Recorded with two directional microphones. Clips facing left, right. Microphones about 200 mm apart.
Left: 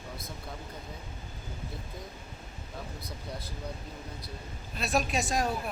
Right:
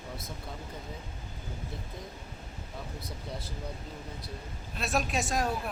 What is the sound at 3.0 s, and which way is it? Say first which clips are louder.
Speech: right 1 dB; 25° right (ahead or behind).